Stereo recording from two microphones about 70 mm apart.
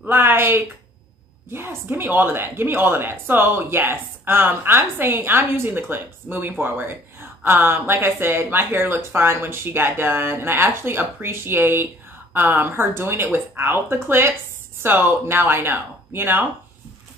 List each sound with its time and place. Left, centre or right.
0.0 s speech: right
6.6 s a sound: right
7.6 s speech: right